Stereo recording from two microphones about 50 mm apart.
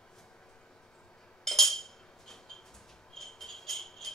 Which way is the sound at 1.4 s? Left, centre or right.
Centre.